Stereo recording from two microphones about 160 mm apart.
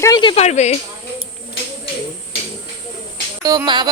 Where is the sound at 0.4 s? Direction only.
45° left (ahead or behind).